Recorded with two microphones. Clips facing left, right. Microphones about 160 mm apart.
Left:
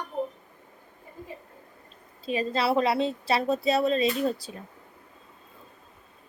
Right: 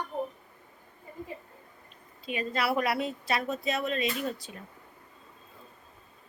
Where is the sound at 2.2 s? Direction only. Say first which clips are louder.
Left 4 dB; 30° left (ahead or behind).